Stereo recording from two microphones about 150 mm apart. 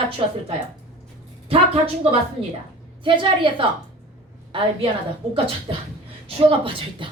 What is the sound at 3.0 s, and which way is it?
Speech, 35° right (ahead or behind).